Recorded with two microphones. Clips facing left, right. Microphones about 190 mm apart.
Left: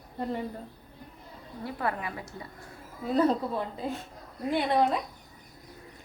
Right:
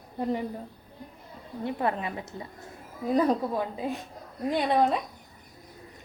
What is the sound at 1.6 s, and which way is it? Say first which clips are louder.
A woman's voice: right 3 dB; 20° right (ahead or behind).